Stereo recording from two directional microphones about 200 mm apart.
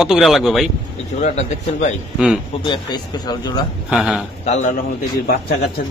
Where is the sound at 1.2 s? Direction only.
35° left (ahead or behind).